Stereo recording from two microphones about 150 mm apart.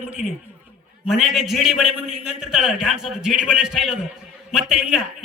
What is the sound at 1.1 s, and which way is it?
A man's voice, centre (ahead or behind).